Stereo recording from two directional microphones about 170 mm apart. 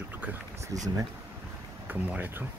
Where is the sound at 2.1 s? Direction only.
10° right (ahead or behind).